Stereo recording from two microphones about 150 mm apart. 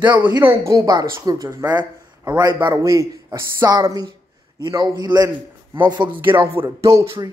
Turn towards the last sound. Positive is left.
turn(degrees=-20)  # may be behind; listen again after turning